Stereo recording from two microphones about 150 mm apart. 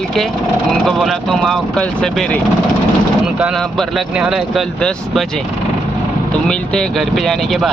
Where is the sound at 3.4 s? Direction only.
Centre (ahead or behind).